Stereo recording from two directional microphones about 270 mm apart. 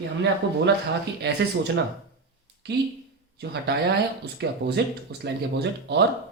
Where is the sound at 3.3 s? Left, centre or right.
Right.